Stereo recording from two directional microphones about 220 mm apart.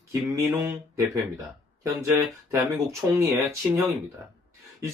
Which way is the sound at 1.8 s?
15° right (ahead or behind).